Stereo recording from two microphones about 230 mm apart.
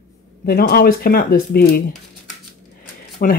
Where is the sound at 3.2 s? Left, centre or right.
Left.